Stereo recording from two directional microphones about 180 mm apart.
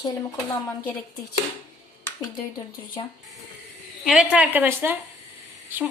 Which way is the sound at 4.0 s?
Centre (ahead or behind).